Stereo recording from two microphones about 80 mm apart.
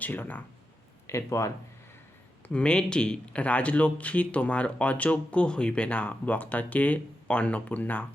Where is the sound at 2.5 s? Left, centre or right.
Centre.